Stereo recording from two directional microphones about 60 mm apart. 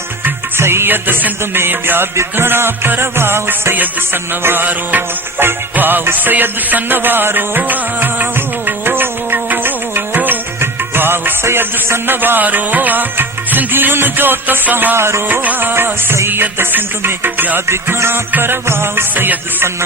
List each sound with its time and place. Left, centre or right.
0.5 s music: right
14.9 s music: right
15.3 s music: right